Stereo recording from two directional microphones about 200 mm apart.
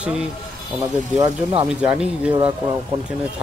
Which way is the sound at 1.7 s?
5° right (ahead or behind).